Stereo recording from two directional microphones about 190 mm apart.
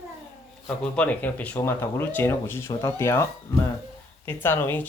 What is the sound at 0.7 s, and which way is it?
Speech, 5° left (ahead or behind).